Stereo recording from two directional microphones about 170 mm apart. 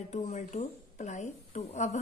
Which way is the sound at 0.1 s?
45° left (ahead or behind).